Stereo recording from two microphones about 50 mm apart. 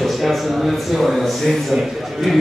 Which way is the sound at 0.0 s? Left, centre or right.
Centre.